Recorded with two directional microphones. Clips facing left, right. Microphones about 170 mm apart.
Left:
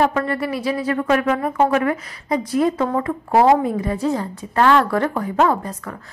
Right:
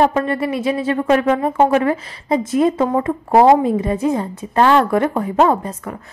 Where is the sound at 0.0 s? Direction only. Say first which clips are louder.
Right 3 dB; 25° right (ahead or behind).